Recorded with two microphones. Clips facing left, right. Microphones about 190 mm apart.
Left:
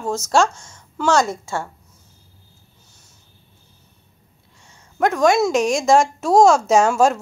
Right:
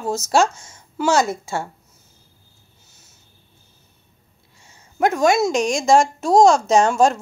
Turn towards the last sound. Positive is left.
turn(degrees=5)  # may be behind; listen again after turning